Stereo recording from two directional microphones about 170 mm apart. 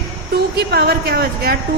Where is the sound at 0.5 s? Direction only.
65° right (ahead or behind).